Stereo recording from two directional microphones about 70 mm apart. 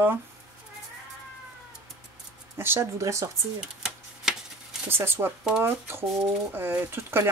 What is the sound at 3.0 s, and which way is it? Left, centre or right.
Speech, right.